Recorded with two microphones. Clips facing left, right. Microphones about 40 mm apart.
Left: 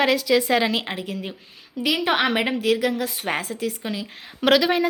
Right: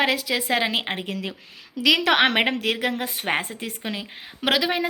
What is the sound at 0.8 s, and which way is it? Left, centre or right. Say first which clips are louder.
Speech: right 1 dB; right.